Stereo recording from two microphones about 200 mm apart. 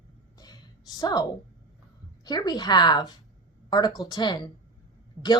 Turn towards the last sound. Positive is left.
turn(degrees=15)  # may be behind; listen again after turning